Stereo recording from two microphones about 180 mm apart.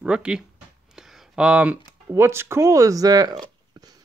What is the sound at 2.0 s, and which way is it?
Speech, 15° right (ahead or behind).